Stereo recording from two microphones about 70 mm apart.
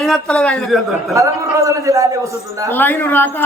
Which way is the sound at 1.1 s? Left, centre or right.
Right.